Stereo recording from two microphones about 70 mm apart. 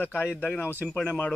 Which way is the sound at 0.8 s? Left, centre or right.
Centre.